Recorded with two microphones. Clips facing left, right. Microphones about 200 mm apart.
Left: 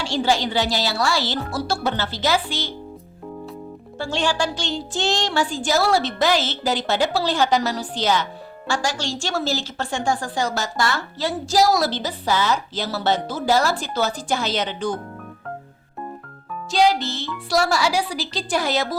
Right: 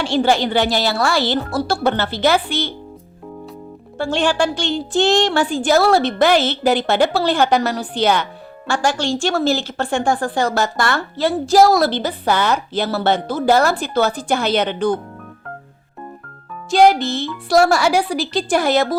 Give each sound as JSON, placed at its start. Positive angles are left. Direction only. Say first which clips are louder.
{"t": 0.0, "sound": "a woman's voice", "louder": "right 5 dB", "side_deg": -60}
{"t": 3.9, "sound": "a woman's voice", "louder": "right 5 dB", "side_deg": -55}
{"t": 16.7, "sound": "speech", "louder": "right 6 dB", "side_deg": -55}